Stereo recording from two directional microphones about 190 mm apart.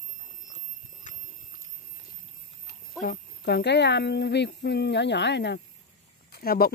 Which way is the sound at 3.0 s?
55° left (ahead or behind).